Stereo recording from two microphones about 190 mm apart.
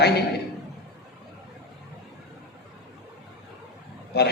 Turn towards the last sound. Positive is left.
turn(degrees=55)  # may be behind; listen again after turning